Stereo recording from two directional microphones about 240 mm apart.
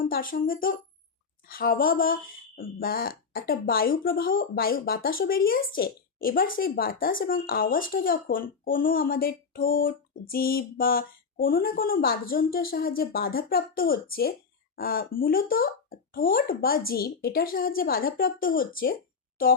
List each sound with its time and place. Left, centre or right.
0.0 s speech: left